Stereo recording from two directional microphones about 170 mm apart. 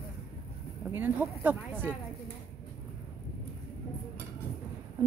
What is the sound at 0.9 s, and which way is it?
Speech, 10° right (ahead or behind).